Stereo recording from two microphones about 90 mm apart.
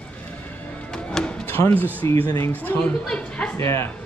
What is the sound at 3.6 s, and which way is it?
Speech, 30° left (ahead or behind).